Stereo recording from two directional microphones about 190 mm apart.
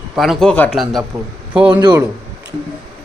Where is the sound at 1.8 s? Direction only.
20° right (ahead or behind).